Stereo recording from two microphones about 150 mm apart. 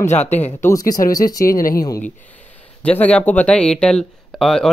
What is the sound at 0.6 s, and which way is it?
Speech, 25° left (ahead or behind).